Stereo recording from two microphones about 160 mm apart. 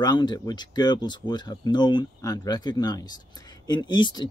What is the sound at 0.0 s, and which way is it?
Speech, 25° left (ahead or behind).